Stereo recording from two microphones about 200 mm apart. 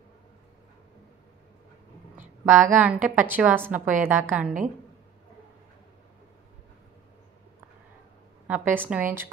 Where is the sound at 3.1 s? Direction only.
10° right (ahead or behind).